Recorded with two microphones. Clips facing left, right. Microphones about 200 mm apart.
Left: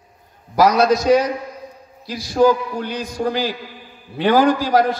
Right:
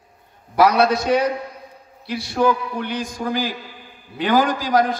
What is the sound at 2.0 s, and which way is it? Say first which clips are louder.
A man's voice: left 4 dB; 60° right (ahead or behind).